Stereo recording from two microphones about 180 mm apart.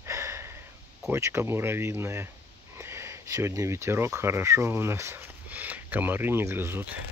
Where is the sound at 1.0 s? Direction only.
15° right (ahead or behind).